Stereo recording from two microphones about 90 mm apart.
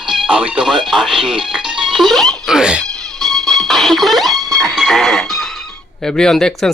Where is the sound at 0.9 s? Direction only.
5° right (ahead or behind).